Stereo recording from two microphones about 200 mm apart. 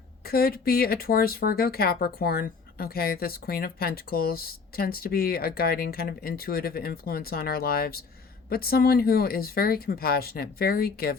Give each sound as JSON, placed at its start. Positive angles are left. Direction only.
{"t": 0.3, "sound": "speech", "side_deg": 50}